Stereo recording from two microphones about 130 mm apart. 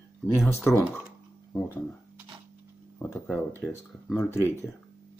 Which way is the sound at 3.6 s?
10° left (ahead or behind).